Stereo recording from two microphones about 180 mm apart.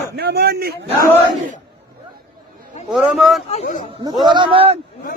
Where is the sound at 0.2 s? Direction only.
60° right (ahead or behind).